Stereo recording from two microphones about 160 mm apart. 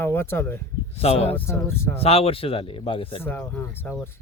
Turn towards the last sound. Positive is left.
turn(degrees=15)  # may be behind; listen again after turning